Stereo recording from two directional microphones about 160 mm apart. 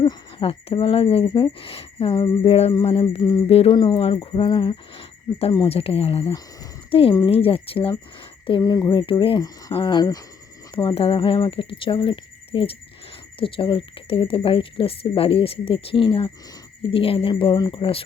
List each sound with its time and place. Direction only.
0.0 s speech: 30° left (ahead or behind)
3.5 s speech: 40° left (ahead or behind)
3.8 s speech: 30° left (ahead or behind)
10.8 s speech: 35° left (ahead or behind)